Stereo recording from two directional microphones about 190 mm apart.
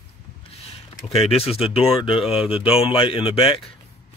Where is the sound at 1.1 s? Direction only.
30° left (ahead or behind).